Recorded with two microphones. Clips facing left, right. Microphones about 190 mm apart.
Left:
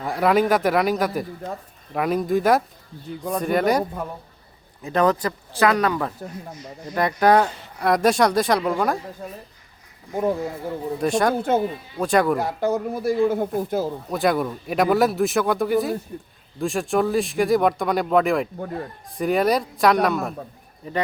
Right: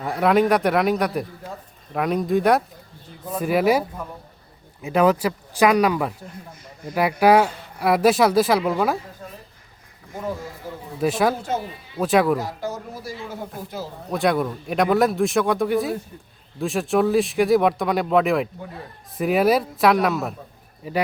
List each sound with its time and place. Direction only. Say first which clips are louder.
0.0 s speech: right 1 dB; centre (ahead or behind)
10.2 s speech: left 7 dB; 55° left (ahead or behind)
11.0 s speech: even; 5° right (ahead or behind)
12.4 s speech: left 6 dB; 60° left (ahead or behind)
14.1 s speech: right 2 dB; centre (ahead or behind)